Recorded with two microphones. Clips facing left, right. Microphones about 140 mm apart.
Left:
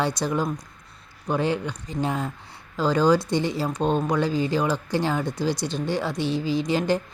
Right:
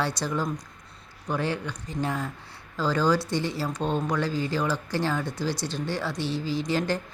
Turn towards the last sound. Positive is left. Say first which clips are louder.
# left 4 dB
turn(degrees=15)  # may be behind; listen again after turning